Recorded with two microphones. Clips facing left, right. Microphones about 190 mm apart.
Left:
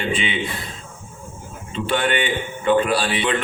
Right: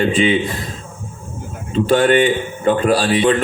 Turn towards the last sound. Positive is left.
turn(degrees=-40)  # may be behind; listen again after turning